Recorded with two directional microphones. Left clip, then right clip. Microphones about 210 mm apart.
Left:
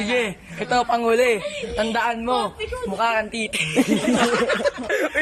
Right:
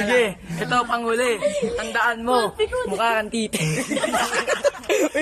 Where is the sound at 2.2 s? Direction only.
Centre (ahead or behind); by 3.8 s 25° right (ahead or behind).